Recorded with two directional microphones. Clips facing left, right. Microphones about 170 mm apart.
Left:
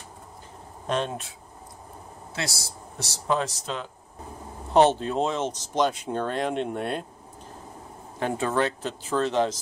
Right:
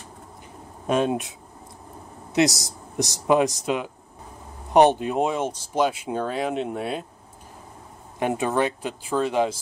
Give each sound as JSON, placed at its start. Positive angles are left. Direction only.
{"t": 0.8, "sound": "speech", "side_deg": -10}
{"t": 2.3, "sound": "speech", "side_deg": -20}
{"t": 8.2, "sound": "speech", "side_deg": -15}